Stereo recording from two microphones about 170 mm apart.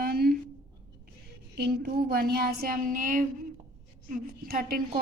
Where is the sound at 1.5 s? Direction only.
70° right (ahead or behind).